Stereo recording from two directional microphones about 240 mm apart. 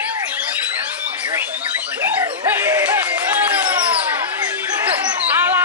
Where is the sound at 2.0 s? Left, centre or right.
Centre.